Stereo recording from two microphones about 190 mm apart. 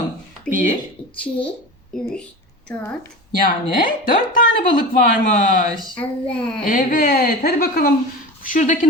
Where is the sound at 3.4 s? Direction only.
45° left (ahead or behind).